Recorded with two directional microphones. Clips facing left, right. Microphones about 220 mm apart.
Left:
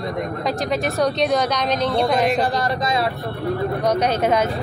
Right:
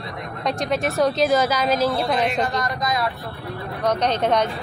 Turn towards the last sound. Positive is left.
turn(degrees=5)  # may be behind; listen again after turning